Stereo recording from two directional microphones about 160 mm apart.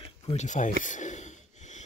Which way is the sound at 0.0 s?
40° left (ahead or behind).